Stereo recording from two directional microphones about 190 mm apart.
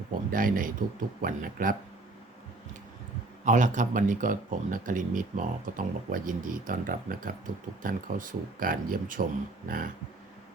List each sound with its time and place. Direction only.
0.1 s speech: 45° right (ahead or behind)
3.4 s speech: 40° right (ahead or behind)